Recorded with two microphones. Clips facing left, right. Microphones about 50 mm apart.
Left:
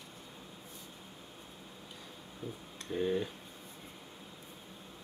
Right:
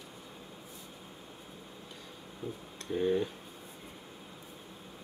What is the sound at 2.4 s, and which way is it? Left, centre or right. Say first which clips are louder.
Speech: right 3 dB; centre.